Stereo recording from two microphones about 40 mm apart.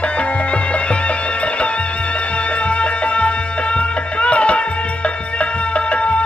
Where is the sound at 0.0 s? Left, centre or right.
Left.